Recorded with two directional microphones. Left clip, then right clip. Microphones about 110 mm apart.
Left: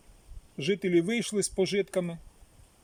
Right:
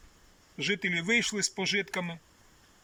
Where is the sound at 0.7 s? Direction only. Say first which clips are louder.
Left 1 dB; 60° left (ahead or behind).